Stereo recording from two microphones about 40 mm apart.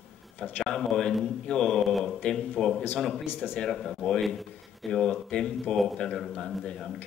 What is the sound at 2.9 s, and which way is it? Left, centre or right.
Speech, centre.